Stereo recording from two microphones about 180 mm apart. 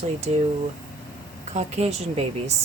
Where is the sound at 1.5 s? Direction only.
35° right (ahead or behind).